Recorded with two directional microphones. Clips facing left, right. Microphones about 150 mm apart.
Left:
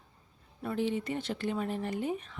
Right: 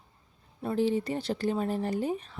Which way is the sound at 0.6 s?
35° right (ahead or behind).